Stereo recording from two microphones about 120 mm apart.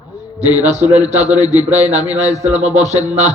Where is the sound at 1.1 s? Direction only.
70° right (ahead or behind).